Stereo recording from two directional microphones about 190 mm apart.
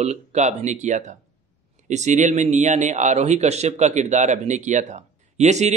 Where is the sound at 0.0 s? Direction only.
35° right (ahead or behind).